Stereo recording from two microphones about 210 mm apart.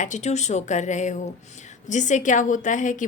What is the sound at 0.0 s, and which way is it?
A woman's voice, 35° left (ahead or behind).